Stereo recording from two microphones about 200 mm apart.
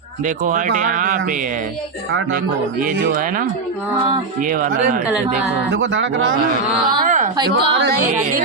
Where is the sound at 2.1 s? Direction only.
55° right (ahead or behind).